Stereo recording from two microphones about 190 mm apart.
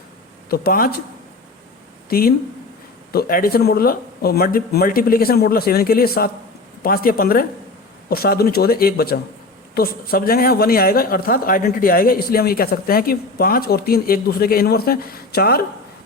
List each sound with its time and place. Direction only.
0.5 s speech: 50° left (ahead or behind)
2.0 s speech: 50° left (ahead or behind)